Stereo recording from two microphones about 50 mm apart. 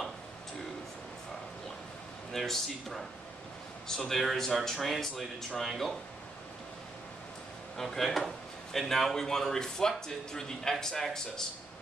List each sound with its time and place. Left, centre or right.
2.3 s speech: centre
7.7 s speech: centre